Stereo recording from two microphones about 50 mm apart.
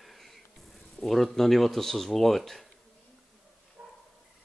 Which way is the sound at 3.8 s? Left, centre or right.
Right.